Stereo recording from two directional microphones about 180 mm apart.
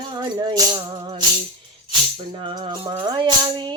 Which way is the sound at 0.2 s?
25° right (ahead or behind).